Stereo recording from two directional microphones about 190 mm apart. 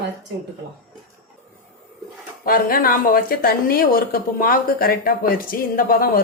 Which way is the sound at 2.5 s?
50° left (ahead or behind).